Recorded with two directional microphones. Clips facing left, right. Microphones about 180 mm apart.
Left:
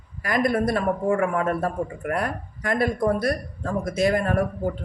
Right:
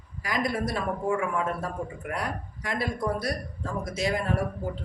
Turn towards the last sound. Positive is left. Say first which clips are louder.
# left 5 dB
turn(degrees=55)  # may be behind; listen again after turning